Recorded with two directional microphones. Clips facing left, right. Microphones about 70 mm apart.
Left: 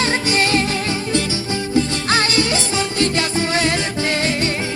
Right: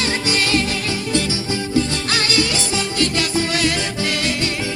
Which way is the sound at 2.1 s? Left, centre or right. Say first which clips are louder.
Left 2 dB; left.